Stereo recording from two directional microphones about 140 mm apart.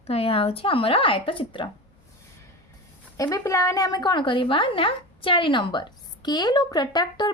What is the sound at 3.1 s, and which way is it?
A woman's voice, 25° left (ahead or behind).